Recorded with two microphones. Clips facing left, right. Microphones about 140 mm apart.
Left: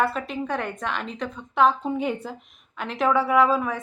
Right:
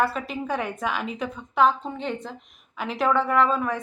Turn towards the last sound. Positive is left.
turn(degrees=5)  # may be behind; listen again after turning